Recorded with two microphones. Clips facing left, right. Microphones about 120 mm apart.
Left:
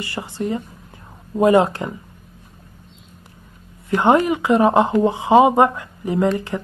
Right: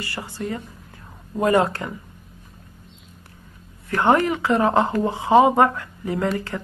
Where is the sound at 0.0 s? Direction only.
20° left (ahead or behind).